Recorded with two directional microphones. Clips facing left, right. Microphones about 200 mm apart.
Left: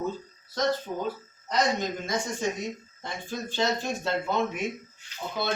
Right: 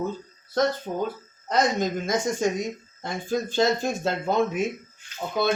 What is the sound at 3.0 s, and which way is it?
A man's voice, 45° right (ahead or behind).